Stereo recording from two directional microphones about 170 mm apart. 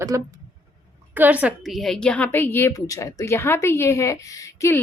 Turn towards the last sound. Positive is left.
turn(degrees=20)  # may be behind; listen again after turning